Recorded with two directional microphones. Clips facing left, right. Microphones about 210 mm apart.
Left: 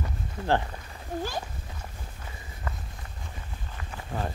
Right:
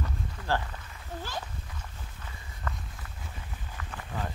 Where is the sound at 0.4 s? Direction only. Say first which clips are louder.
Left 5 dB; 25° left (ahead or behind).